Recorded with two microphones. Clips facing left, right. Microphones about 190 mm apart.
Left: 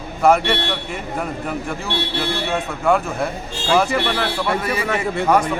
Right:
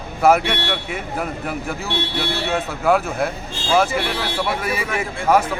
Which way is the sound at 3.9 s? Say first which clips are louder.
Left 3 dB; 70° left (ahead or behind).